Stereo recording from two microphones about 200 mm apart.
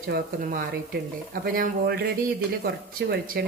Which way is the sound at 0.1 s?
50° right (ahead or behind).